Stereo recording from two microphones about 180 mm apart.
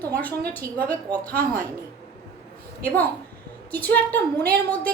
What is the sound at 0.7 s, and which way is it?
Speech, 10° left (ahead or behind).